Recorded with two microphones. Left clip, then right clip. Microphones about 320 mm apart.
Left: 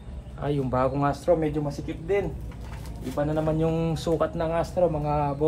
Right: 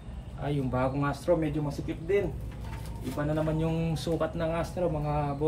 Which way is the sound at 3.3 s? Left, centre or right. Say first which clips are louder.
Left 4 dB; centre.